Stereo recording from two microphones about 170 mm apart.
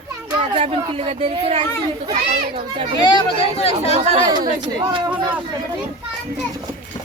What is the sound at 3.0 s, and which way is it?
Speech, 30° left (ahead or behind).